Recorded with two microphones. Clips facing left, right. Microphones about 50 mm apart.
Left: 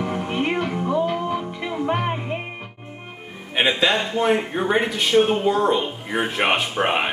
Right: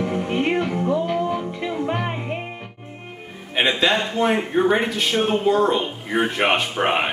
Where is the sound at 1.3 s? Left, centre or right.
Left.